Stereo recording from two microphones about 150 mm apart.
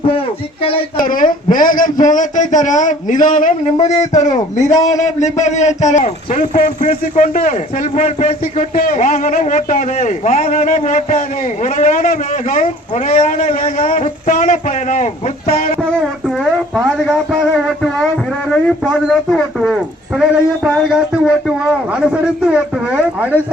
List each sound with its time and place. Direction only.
0.9 s a man's voice: 65° left (ahead or behind); by 15.7 s 50° left (ahead or behind)
15.8 s speech: centre (ahead or behind)
18.5 s speech: centre (ahead or behind)